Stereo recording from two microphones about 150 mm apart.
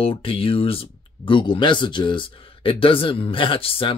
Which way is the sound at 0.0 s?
35° left (ahead or behind).